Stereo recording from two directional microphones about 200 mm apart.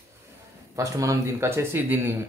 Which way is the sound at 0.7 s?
15° right (ahead or behind).